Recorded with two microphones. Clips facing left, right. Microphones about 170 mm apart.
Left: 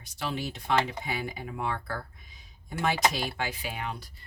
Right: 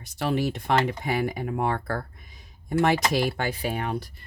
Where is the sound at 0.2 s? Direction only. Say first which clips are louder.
Right 8 dB; 50° right (ahead or behind).